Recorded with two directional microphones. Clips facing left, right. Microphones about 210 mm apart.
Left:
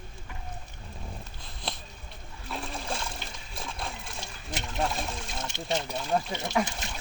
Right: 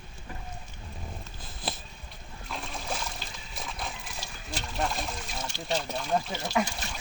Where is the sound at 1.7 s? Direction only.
5° right (ahead or behind).